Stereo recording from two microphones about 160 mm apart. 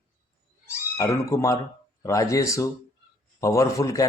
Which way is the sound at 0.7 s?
20° left (ahead or behind).